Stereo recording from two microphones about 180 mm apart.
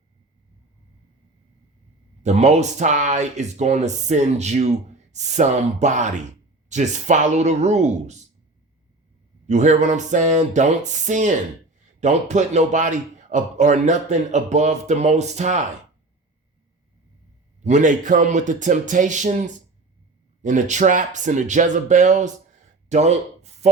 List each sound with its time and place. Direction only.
2.2 s speech: 40° right (ahead or behind)
9.5 s speech: 40° right (ahead or behind)
17.6 s a man's voice: 40° right (ahead or behind)
22.9 s a sound: 40° right (ahead or behind)